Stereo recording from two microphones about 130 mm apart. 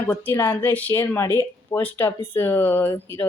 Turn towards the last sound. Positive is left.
turn(degrees=15)  # may be behind; listen again after turning